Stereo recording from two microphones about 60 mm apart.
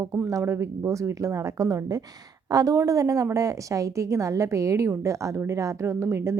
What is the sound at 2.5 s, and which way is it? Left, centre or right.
Speech, right.